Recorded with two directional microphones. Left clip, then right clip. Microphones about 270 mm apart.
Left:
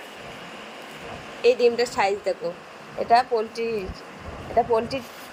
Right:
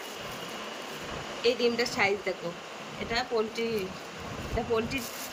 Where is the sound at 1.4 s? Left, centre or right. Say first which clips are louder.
Left 8 dB; centre.